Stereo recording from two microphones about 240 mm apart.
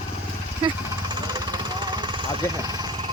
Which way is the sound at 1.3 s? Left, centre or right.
Centre.